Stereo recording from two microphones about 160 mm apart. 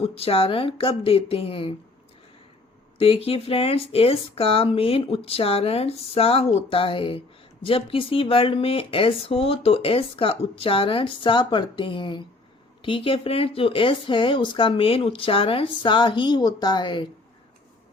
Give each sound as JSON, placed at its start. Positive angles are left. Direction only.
{"t": 0.0, "sound": "speech", "side_deg": 35}
{"t": 3.0, "sound": "speech", "side_deg": 35}